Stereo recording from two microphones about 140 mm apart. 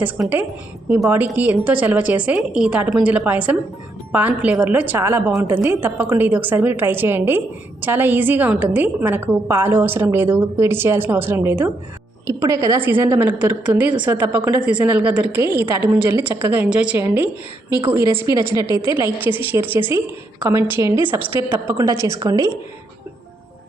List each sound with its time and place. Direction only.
0.2 s a woman's voice: 10° right (ahead or behind)
17.9 s a woman's voice: 20° right (ahead or behind)